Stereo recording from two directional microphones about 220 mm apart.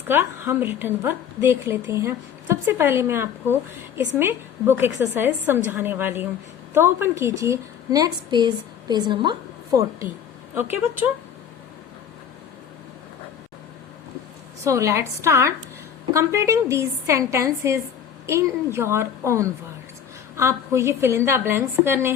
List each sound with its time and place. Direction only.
0.1 s a woman's voice: 10° right (ahead or behind)
14.6 s a woman's voice: 15° right (ahead or behind)